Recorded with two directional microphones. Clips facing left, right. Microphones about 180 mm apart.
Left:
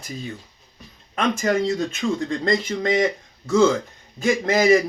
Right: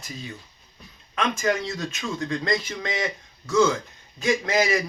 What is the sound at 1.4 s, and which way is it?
Speech, 40° left (ahead or behind).